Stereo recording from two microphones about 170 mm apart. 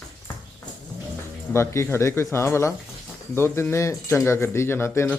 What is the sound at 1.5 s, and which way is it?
Speech, 15° left (ahead or behind).